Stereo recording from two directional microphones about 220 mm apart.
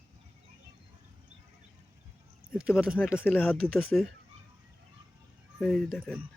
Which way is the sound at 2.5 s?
5° right (ahead or behind).